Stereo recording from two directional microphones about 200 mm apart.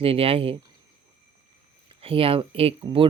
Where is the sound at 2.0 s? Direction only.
30° right (ahead or behind).